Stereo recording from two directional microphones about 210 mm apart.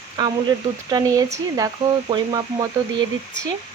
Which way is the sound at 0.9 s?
15° right (ahead or behind).